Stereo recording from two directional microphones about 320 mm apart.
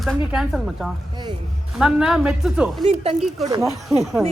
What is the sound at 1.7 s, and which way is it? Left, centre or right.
A woman's voice, centre.